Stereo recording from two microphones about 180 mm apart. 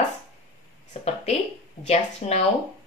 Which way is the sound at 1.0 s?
35° left (ahead or behind).